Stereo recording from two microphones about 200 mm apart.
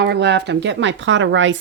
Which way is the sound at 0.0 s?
55° right (ahead or behind).